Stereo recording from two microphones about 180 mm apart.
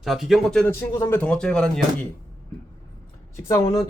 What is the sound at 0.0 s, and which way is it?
Speech, centre (ahead or behind).